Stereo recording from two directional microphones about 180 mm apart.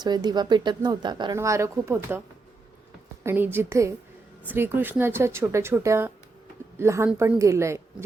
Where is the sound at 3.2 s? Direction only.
10° right (ahead or behind).